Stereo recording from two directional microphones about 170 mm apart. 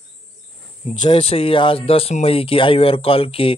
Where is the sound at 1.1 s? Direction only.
35° left (ahead or behind).